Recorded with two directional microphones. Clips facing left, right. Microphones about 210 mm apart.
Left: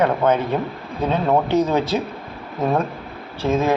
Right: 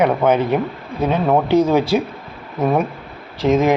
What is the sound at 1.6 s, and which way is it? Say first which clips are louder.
Speech: right 4 dB; 10° right (ahead or behind).